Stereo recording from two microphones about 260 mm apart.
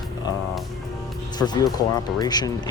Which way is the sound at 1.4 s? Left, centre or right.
Centre.